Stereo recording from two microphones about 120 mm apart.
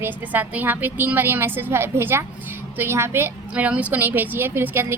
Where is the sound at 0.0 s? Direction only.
15° right (ahead or behind).